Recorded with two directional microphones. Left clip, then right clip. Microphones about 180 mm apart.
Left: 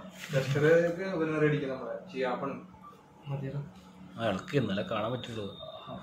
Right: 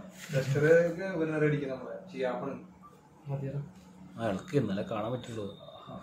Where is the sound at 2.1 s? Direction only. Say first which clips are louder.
Left 1 dB; 15° right (ahead or behind).